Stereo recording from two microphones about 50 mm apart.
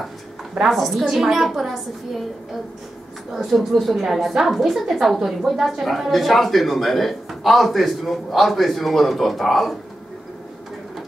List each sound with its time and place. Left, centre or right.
0.6 s speech: centre
3.3 s speech: centre